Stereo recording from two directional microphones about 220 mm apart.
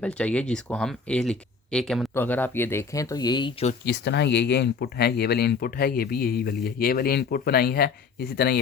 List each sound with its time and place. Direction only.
0.0 s speech: 5° left (ahead or behind); by 3.8 s 25° left (ahead or behind)
3.8 s speech: 50° left (ahead or behind)